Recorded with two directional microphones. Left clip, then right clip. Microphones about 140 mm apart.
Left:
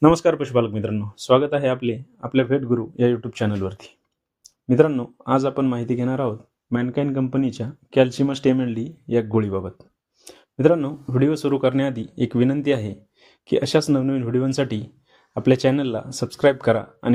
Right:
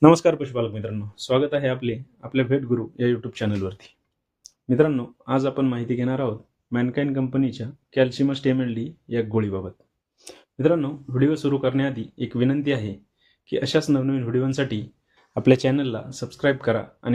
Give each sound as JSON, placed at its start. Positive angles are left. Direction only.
{"t": 0.0, "sound": "speech", "side_deg": 0}
{"t": 0.5, "sound": "speech", "side_deg": 45}
{"t": 4.4, "sound": "a sound", "side_deg": 0}
{"t": 4.8, "sound": "speech", "side_deg": 35}
{"t": 10.2, "sound": "speech", "side_deg": 0}
{"t": 10.6, "sound": "speech", "side_deg": 40}
{"t": 15.3, "sound": "speech", "side_deg": 0}
{"t": 15.7, "sound": "speech", "side_deg": 45}